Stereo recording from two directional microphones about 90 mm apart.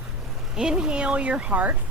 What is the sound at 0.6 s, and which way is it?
Speech, 10° right (ahead or behind).